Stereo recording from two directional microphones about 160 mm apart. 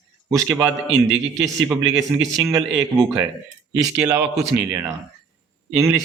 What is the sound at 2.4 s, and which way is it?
Speech, 20° right (ahead or behind).